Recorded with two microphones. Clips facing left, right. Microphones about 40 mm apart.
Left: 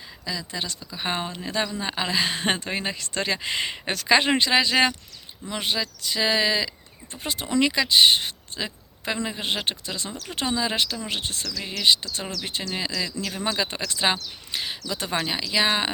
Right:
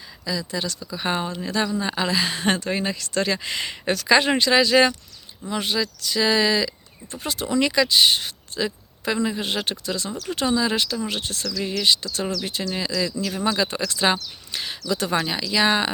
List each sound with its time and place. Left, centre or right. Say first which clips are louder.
0.3 s speech: right 4 dB; left